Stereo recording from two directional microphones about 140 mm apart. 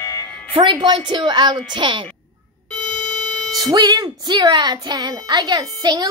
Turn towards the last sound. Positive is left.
turn(degrees=-30)  # may be behind; listen again after turning